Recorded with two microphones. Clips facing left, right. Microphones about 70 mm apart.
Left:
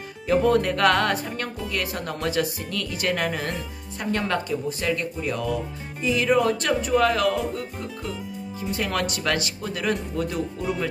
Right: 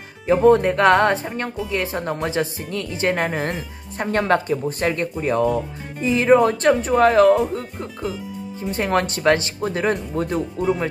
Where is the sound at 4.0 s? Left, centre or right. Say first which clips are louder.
Right 6 dB; right.